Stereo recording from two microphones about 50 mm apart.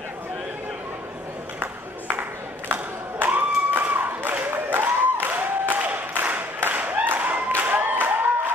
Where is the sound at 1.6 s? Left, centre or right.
Right.